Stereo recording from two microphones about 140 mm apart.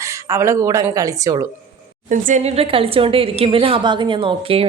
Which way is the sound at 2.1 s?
60° right (ahead or behind).